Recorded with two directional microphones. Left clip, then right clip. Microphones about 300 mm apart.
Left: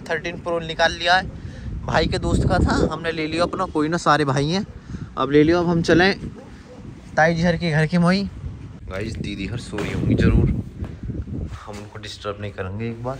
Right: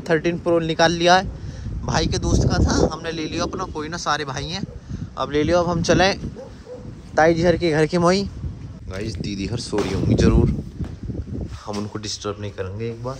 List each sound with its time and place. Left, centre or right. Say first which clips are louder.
0.0 s speech: right 5 dB; right
1.9 s speech: left 2 dB; centre
7.2 s speech: right 2 dB; right
8.9 s speech: even; centre
11.6 s speech: right 6 dB; right